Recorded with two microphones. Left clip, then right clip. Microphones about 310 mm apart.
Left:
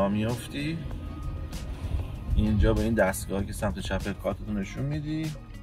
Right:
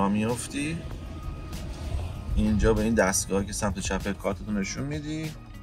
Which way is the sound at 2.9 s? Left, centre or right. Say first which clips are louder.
Right 2 dB; centre.